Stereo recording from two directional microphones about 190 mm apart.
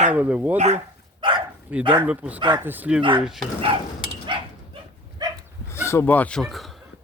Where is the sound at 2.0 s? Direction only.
5° right (ahead or behind).